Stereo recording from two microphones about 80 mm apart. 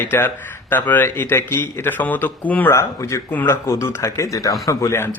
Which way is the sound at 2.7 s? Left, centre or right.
Left.